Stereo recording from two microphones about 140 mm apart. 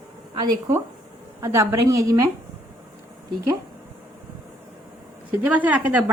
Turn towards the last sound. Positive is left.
turn(degrees=-10)  # may be behind; listen again after turning